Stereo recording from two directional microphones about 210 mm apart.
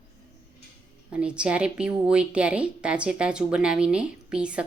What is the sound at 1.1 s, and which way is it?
A woman's voice, 5° right (ahead or behind).